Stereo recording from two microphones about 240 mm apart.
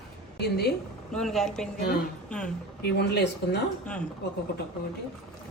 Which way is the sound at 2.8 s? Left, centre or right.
Left.